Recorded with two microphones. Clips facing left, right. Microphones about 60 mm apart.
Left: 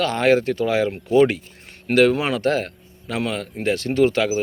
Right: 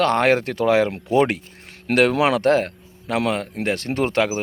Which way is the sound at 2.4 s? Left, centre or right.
Right.